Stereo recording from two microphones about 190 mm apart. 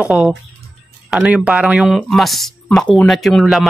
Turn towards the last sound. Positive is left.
turn(degrees=0)  # may be behind; listen again after turning